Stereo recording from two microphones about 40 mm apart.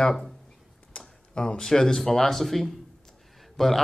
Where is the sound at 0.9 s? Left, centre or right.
Left; by 3.8 s centre.